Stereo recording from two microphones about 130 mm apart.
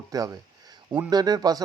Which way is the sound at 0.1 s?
30° right (ahead or behind).